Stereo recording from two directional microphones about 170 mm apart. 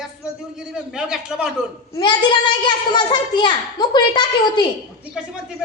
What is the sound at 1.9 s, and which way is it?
A child's voice, 25° left (ahead or behind).